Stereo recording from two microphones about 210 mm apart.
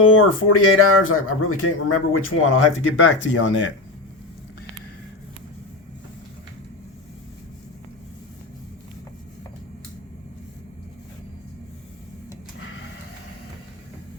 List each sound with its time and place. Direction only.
0.0 s speech: 75° left (ahead or behind)
3.2 s speech: 65° left (ahead or behind)